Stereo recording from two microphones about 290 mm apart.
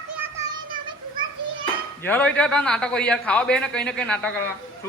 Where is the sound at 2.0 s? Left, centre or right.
Centre.